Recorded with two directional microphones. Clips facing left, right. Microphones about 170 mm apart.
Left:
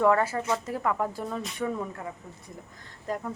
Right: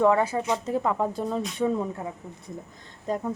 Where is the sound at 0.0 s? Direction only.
15° right (ahead or behind).